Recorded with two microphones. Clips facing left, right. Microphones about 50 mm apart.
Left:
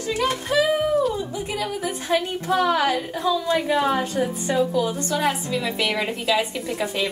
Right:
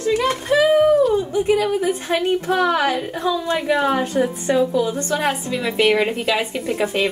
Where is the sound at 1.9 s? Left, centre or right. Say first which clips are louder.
Right 4 dB; right.